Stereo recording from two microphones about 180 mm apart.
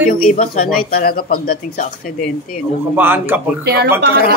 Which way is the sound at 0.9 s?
55° left (ahead or behind).